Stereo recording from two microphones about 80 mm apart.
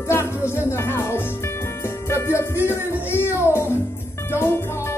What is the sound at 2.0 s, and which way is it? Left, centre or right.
Music, left.